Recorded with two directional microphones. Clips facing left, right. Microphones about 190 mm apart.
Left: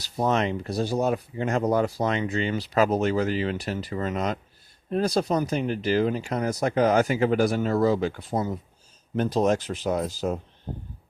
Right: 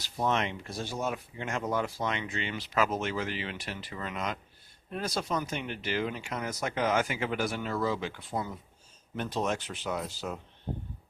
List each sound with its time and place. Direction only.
0.2 s speech: 40° left (ahead or behind)